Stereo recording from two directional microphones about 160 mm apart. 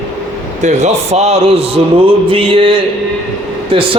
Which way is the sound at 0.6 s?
45° right (ahead or behind).